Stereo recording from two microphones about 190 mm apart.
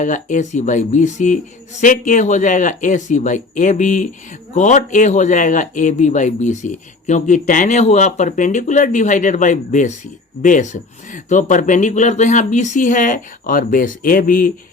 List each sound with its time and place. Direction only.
0.0 s speech: 40° left (ahead or behind)